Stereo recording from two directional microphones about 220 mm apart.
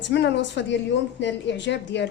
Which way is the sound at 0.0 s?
50° left (ahead or behind).